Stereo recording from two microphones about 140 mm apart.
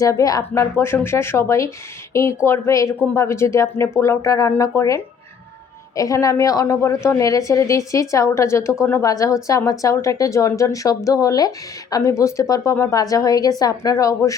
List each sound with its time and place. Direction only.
0.0 s a woman's voice: 25° left (ahead or behind)